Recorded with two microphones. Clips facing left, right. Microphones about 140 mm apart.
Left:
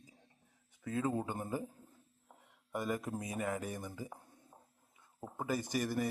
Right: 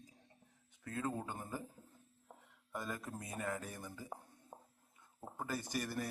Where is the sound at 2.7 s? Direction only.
15° left (ahead or behind).